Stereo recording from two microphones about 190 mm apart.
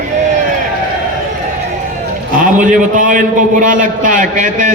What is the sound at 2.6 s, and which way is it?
A man's voice, 40° right (ahead or behind).